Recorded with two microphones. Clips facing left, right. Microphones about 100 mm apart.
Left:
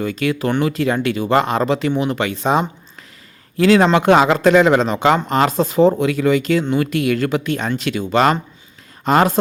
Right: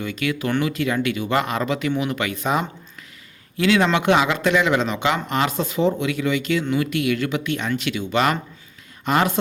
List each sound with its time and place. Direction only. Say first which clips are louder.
0.0 s speech: left 5 dB; 35° left (ahead or behind)